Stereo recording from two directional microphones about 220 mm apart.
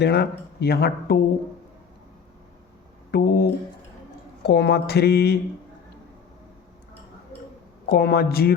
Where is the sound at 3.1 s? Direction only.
45° left (ahead or behind).